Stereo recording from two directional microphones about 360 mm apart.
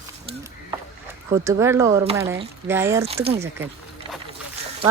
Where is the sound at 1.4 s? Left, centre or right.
Centre.